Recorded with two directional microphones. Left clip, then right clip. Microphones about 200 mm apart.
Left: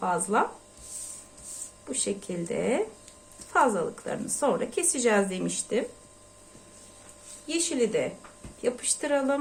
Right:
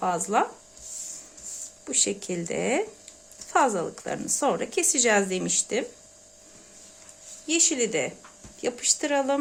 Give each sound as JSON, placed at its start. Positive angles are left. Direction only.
{"t": 0.0, "sound": "speech", "side_deg": -45}
{"t": 1.9, "sound": "a woman's voice", "side_deg": -50}
{"t": 7.4, "sound": "a woman's voice", "side_deg": -45}